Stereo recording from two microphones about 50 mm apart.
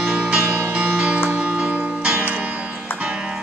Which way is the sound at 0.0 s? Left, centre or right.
Centre.